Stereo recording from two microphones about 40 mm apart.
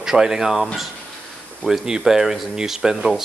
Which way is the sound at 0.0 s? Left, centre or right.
Centre.